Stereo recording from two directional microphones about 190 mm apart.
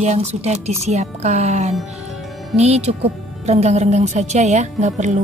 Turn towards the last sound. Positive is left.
turn(degrees=-40)  # may be behind; listen again after turning